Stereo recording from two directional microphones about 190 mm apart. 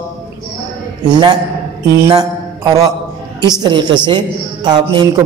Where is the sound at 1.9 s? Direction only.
20° right (ahead or behind).